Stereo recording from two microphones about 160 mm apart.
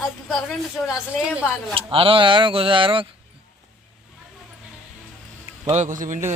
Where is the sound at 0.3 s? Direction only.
5° right (ahead or behind).